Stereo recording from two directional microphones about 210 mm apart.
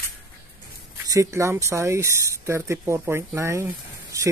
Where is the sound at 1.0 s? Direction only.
15° right (ahead or behind).